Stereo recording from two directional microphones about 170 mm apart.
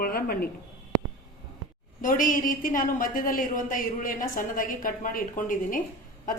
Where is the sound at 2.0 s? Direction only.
50° left (ahead or behind).